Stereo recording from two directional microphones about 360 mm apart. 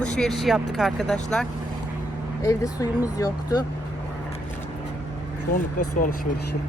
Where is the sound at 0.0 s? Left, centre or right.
Centre.